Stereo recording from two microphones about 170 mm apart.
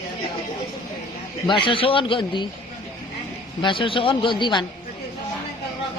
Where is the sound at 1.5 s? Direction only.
30° left (ahead or behind).